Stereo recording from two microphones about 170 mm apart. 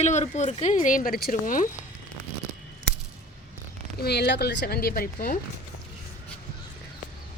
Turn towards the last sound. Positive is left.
turn(degrees=60)  # may be behind; listen again after turning